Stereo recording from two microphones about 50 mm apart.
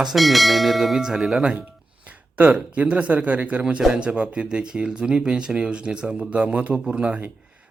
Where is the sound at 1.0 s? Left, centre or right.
Centre.